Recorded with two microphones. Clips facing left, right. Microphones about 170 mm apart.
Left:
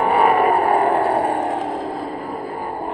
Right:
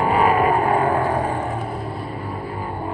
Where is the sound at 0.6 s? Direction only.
35° left (ahead or behind).